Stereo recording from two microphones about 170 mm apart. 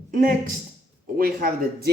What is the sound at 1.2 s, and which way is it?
Speech, 60° right (ahead or behind).